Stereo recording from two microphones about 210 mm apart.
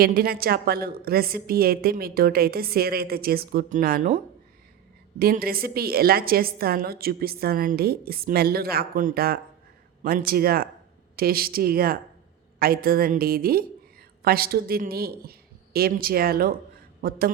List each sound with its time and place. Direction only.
0.0 s a woman's voice: 45° right (ahead or behind)
5.2 s a woman's voice: 45° right (ahead or behind)